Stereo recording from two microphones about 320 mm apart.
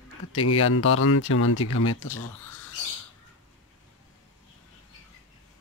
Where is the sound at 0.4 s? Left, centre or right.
Left.